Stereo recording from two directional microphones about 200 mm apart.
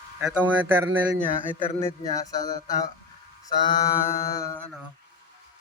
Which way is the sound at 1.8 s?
15° left (ahead or behind).